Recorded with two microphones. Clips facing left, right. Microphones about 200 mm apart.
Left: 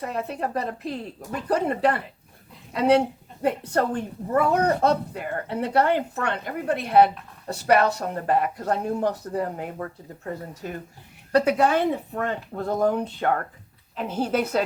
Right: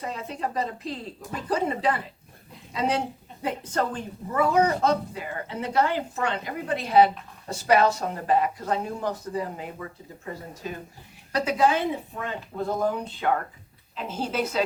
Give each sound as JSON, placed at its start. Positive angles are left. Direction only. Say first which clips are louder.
{"t": 0.0, "sound": "a woman's voice", "louder": "left 3 dB", "side_deg": 60}